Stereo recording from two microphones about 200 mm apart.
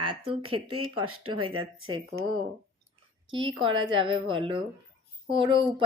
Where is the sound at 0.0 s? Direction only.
25° right (ahead or behind).